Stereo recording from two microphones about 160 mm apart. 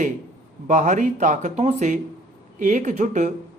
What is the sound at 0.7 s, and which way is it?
Speech, 50° right (ahead or behind).